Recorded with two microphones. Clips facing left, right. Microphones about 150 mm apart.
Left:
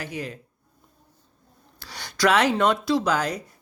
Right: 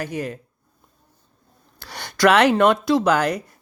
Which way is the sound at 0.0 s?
45° right (ahead or behind).